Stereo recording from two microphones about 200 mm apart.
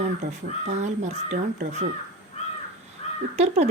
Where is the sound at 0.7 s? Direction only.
35° right (ahead or behind).